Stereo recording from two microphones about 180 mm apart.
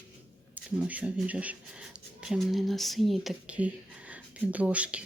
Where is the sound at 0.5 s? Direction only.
10° right (ahead or behind).